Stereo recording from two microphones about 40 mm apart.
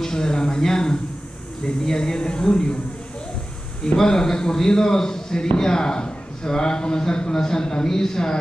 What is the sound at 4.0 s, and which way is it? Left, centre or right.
A man's voice, centre.